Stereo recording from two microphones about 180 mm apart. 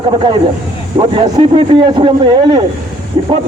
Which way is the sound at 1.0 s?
30° right (ahead or behind).